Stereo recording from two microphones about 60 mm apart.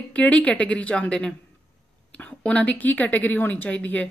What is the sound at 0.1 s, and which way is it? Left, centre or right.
Speech, left.